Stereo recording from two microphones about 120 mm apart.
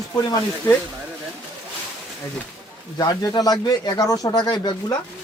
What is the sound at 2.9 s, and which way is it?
Speech, 30° left (ahead or behind).